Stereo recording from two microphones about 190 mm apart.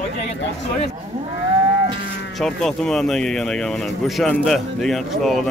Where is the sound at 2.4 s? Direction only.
Centre (ahead or behind).